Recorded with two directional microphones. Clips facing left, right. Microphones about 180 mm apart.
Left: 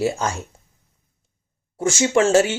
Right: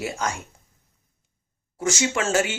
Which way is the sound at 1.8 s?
30° left (ahead or behind).